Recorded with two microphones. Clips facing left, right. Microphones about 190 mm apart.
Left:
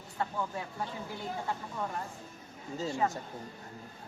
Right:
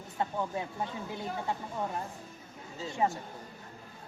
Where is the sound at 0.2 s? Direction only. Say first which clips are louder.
Right 2 dB; 20° right (ahead or behind).